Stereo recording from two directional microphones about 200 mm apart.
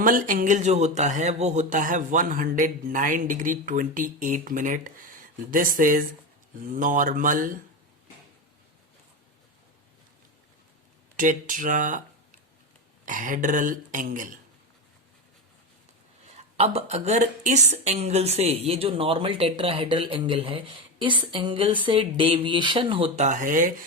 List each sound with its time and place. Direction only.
0.0 s speech: 45° right (ahead or behind)
11.2 s speech: 40° right (ahead or behind)
16.3 s a woman's voice: 30° right (ahead or behind)